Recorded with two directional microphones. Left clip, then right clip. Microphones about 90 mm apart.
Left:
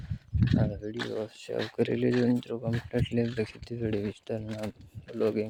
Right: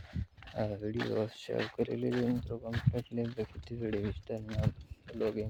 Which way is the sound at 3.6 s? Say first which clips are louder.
Left 4 dB; 45° left (ahead or behind).